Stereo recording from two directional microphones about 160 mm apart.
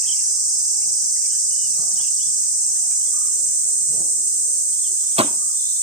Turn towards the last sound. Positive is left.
turn(degrees=-35)  # may be behind; listen again after turning